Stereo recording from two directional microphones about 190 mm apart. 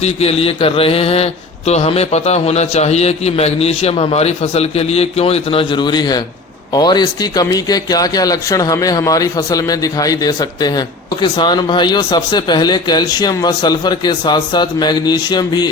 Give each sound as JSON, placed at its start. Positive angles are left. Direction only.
{"t": 0.0, "sound": "speech", "side_deg": 30}